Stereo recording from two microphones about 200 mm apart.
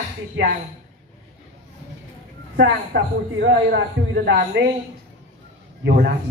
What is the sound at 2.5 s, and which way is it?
A man's voice, 60° right (ahead or behind).